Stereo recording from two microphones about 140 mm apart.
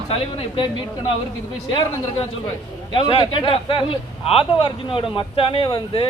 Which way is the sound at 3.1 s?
35° left (ahead or behind).